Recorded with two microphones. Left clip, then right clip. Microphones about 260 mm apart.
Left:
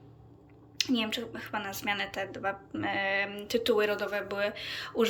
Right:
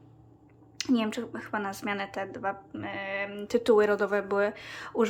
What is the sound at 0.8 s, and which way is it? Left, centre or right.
Speech, centre.